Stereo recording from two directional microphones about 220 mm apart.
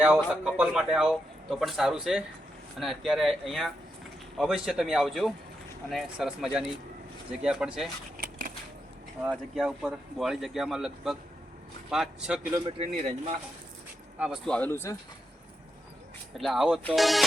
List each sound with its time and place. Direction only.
0.4 s speech: 5° right (ahead or behind)
8.2 s a sound: 40° right (ahead or behind)
9.2 s speech: 5° right (ahead or behind)
12.6 s speech: 25° right (ahead or behind)
14.2 s speech: centre (ahead or behind)
16.4 s speech: centre (ahead or behind)